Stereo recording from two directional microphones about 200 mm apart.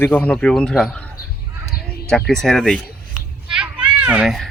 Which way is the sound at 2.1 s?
5° left (ahead or behind).